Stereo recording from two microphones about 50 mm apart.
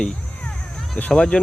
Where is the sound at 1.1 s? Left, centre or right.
Centre.